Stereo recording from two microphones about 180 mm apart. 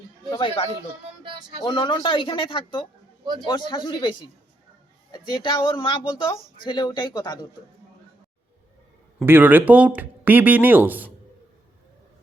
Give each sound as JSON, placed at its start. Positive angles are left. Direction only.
{"t": 0.3, "sound": "speech", "side_deg": 30}
{"t": 1.0, "sound": "a sound", "side_deg": -25}
{"t": 1.6, "sound": "speech", "side_deg": 25}
{"t": 9.2, "sound": "speech", "side_deg": -10}